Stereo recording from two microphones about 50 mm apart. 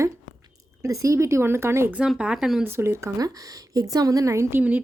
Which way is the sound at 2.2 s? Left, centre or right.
Centre.